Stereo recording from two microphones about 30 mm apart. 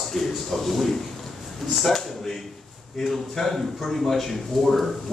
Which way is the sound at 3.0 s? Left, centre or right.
Centre.